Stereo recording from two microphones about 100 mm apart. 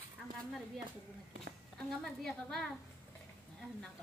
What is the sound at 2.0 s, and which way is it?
Speech, 5° left (ahead or behind).